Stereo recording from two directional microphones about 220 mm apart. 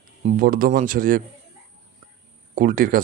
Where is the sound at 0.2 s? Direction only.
35° right (ahead or behind).